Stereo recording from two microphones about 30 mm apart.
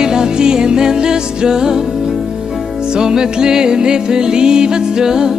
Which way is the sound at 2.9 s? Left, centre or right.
Right.